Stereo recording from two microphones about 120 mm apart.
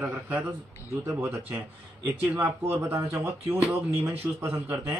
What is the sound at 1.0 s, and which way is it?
Speech, 20° right (ahead or behind).